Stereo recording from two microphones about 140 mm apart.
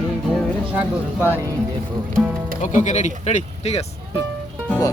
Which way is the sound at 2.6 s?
55° left (ahead or behind).